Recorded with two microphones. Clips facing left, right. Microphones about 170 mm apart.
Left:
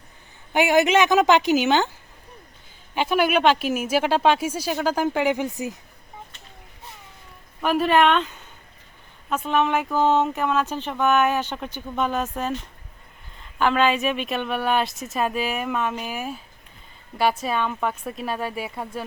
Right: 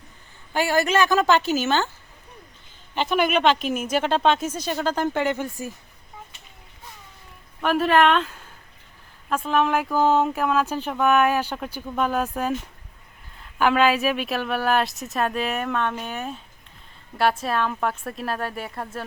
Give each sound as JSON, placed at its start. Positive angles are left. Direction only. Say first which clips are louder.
{"t": 0.5, "sound": "speech", "louder": "left 3 dB", "side_deg": 20}
{"t": 2.9, "sound": "speech", "louder": "left 1 dB", "side_deg": 10}
{"t": 7.6, "sound": "speech", "louder": "even", "side_deg": 0}
{"t": 17.4, "sound": "speech", "louder": "even", "side_deg": 0}